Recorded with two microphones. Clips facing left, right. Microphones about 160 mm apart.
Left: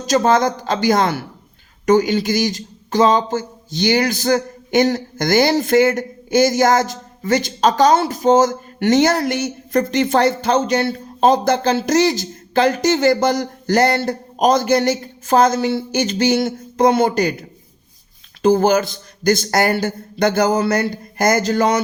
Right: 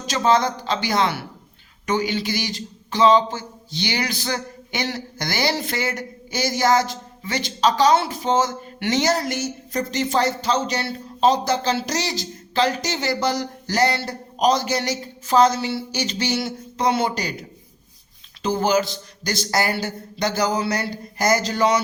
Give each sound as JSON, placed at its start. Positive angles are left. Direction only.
{"t": 0.0, "sound": "speech", "side_deg": 45}
{"t": 18.4, "sound": "speech", "side_deg": 50}